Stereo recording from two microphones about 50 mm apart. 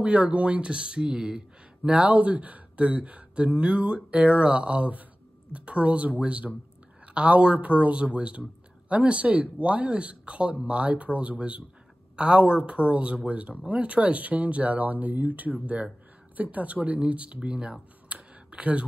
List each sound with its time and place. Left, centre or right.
0.0 s a man's voice: right
1.9 s a man's voice: right
18.0 s a sound: right